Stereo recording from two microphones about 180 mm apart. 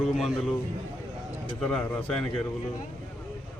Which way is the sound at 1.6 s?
5° left (ahead or behind).